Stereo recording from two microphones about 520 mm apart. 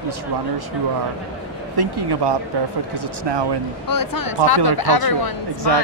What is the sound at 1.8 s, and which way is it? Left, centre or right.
Speech, right.